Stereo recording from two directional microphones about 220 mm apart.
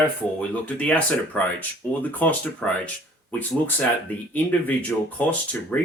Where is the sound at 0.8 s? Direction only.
5° left (ahead or behind).